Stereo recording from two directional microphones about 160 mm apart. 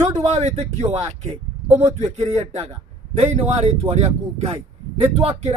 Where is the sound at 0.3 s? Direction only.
45° right (ahead or behind).